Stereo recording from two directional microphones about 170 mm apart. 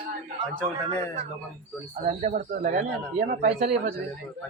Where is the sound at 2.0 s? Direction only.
45° right (ahead or behind).